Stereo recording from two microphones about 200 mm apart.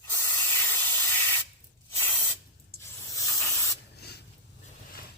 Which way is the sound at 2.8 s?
15° left (ahead or behind).